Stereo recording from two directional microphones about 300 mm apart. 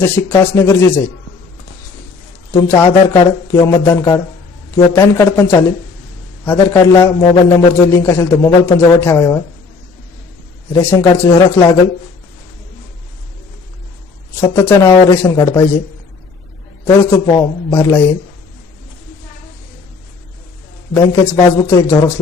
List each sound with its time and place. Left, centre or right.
0.0 s a man's voice: centre
2.5 s a man's voice: centre
10.7 s a man's voice: centre
14.4 s a man's voice: centre
16.8 s a man's voice: centre
20.9 s a man's voice: centre